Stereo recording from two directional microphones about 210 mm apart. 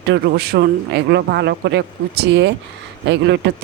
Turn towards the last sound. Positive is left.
turn(degrees=-55)  # may be behind; listen again after turning